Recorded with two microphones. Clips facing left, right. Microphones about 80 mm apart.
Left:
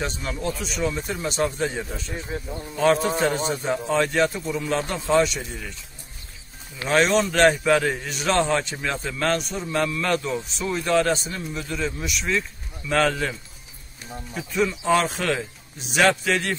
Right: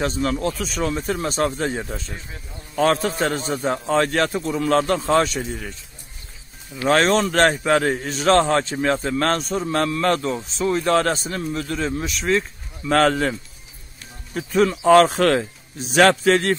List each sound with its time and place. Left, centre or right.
0.0 s a man's voice: right
2.1 s speech: left
3.6 s a man's voice: right
5.0 s a man's voice: right
6.8 s a man's voice: right
14.3 s a man's voice: right